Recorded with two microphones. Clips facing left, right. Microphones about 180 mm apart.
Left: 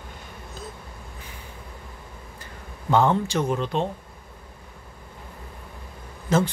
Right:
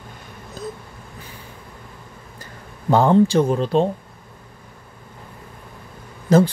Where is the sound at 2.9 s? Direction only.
35° right (ahead or behind).